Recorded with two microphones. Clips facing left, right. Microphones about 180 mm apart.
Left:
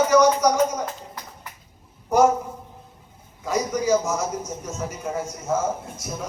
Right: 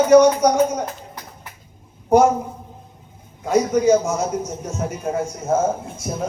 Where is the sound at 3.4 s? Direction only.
55° right (ahead or behind).